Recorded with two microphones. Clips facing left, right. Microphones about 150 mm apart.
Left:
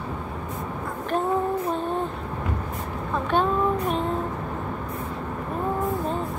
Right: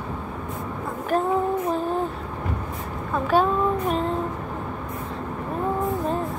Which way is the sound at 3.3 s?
5° right (ahead or behind).